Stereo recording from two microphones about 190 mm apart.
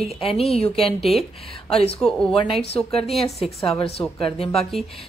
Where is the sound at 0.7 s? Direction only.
Centre (ahead or behind).